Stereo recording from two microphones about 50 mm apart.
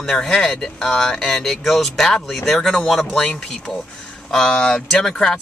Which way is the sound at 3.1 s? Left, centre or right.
Centre.